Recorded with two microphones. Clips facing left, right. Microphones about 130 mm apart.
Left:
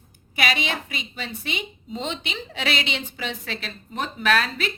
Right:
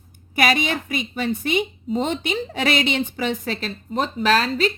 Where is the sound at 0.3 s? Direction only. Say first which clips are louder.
Right 5 dB; 45° right (ahead or behind).